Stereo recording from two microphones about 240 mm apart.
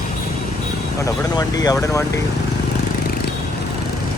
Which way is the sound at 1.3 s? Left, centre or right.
Centre.